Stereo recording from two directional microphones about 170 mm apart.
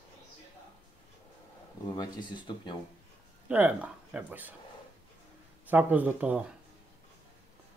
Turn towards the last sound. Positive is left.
turn(degrees=-5)  # may be behind; listen again after turning